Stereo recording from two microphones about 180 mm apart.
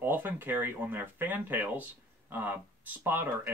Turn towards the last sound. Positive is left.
turn(degrees=-10)  # may be behind; listen again after turning